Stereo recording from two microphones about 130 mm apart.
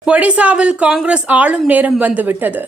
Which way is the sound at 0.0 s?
10° right (ahead or behind).